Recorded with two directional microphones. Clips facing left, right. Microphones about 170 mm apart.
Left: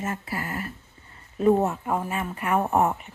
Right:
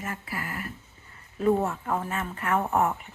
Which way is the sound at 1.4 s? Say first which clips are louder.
Left 3 dB; 20° left (ahead or behind).